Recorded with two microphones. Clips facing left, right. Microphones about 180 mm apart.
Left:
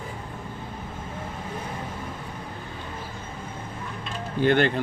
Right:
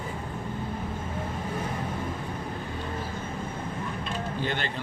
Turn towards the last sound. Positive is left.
turn(degrees=55)  # may be behind; listen again after turning